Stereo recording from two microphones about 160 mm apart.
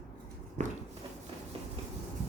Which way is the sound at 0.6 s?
45° right (ahead or behind).